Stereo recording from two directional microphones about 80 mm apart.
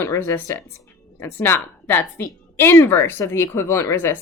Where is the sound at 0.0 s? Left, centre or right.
Left.